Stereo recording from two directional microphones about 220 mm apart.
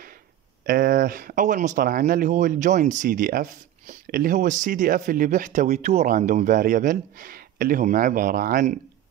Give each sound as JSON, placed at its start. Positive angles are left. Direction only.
{"t": 0.7, "sound": "speech", "side_deg": -40}